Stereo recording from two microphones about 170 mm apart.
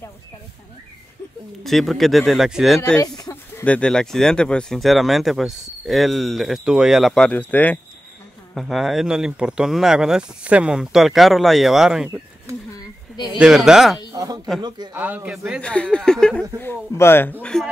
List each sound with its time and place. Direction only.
1.6 s speech: centre (ahead or behind)
3.2 s speech: 15° left (ahead or behind); by 12.1 s 5° right (ahead or behind)
13.1 s speech: 25° left (ahead or behind)
13.4 s speech: 5° right (ahead or behind)
14.1 s a sound: 20° right (ahead or behind)
15.0 s a man's voice: 10° right (ahead or behind)
15.6 s a man's voice: 5° left (ahead or behind)